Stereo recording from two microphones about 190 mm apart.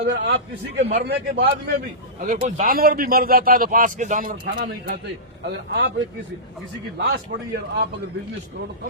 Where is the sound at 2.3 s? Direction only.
40° right (ahead or behind).